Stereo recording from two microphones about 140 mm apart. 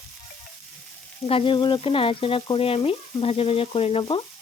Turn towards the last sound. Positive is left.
turn(degrees=40)  # may be behind; listen again after turning